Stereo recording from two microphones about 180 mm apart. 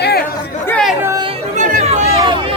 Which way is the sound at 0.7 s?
5° left (ahead or behind).